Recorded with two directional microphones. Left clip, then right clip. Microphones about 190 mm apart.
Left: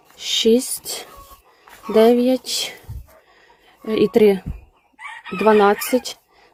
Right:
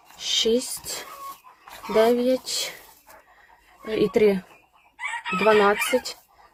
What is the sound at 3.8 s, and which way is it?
Speech, 35° left (ahead or behind).